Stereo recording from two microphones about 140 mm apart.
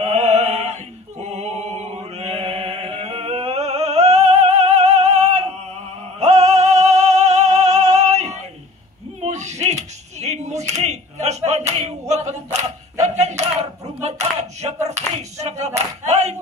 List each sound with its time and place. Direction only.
0.0 s music: 50° right (ahead or behind)
1.2 s chant: 50° right (ahead or behind)
6.1 s music: 50° right (ahead or behind)
9.2 s a sound: 55° right (ahead or behind)